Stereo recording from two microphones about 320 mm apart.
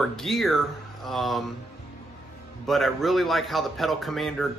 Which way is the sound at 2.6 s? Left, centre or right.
Centre.